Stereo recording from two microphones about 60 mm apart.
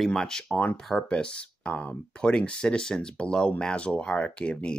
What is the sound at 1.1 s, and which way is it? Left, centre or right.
Speech, centre.